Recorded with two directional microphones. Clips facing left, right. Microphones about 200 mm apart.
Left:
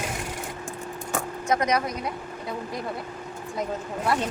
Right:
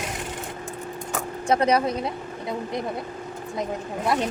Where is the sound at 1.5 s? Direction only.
30° right (ahead or behind).